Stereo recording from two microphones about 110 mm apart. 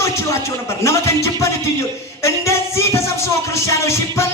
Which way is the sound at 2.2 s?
25° left (ahead or behind).